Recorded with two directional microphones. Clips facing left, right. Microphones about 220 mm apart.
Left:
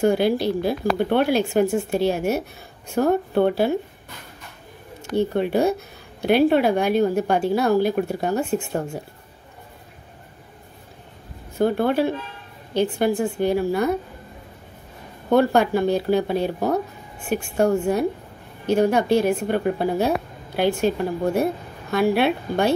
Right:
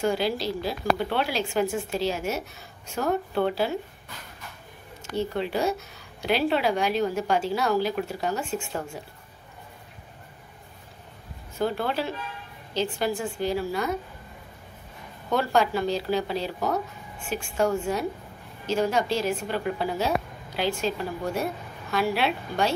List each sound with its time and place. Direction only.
0.0 s speech: 55° left (ahead or behind)
3.0 s speech: 30° left (ahead or behind)
3.3 s speech: 55° left (ahead or behind)
5.1 s speech: 55° left (ahead or behind)
11.6 s speech: 55° left (ahead or behind)
15.2 s speech: 55° left (ahead or behind)
16.5 s speech: 35° left (ahead or behind)
17.3 s speech: 55° left (ahead or behind)
18.7 s speech: 60° left (ahead or behind)